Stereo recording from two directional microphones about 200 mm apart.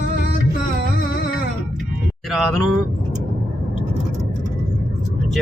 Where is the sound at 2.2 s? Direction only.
Centre (ahead or behind).